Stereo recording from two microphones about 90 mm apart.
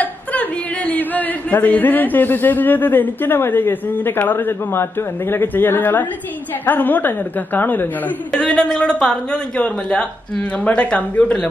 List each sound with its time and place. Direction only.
0.0 s a woman's voice: 20° left (ahead or behind)